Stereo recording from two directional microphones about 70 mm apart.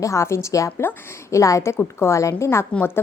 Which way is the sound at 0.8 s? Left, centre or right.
Left.